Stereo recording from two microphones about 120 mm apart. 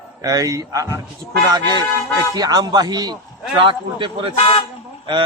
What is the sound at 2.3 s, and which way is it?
Speech, 30° right (ahead or behind).